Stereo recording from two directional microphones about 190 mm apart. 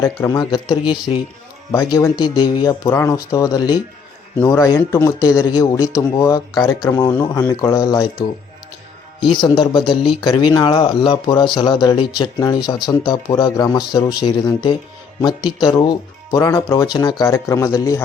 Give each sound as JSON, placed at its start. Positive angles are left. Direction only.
{"t": 0.0, "sound": "speech", "side_deg": 20}
{"t": 9.4, "sound": "speech", "side_deg": 25}